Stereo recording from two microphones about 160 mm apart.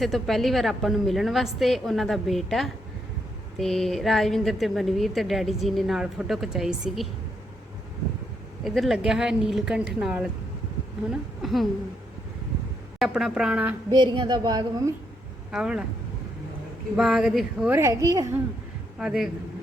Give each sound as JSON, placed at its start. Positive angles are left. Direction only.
{"t": 0.0, "sound": "a woman's voice", "side_deg": 0}
{"t": 8.6, "sound": "a woman's voice", "side_deg": 0}
{"t": 13.0, "sound": "a woman's voice", "side_deg": 0}
{"t": 13.9, "sound": "speech", "side_deg": -25}
{"t": 15.5, "sound": "a woman's voice", "side_deg": -5}
{"t": 17.0, "sound": "a woman's voice", "side_deg": 0}
{"t": 17.7, "sound": "speech", "side_deg": -20}
{"t": 18.9, "sound": "a woman's voice", "side_deg": -5}